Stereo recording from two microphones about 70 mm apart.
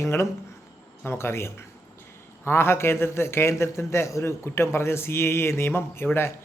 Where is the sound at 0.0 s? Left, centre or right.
Left.